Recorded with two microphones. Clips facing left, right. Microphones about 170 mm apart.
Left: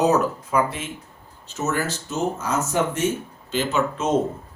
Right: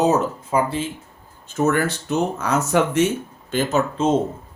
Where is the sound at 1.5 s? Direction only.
55° right (ahead or behind); by 3.0 s 75° right (ahead or behind).